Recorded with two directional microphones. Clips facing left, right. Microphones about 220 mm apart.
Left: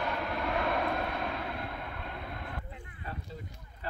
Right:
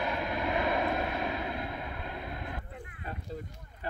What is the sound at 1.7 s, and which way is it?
Vehicle, 10° right (ahead or behind).